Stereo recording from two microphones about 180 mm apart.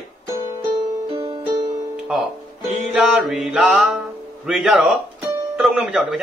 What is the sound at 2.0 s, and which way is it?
Speech, 5° right (ahead or behind).